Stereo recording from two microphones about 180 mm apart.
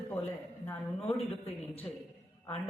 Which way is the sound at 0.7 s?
10° left (ahead or behind).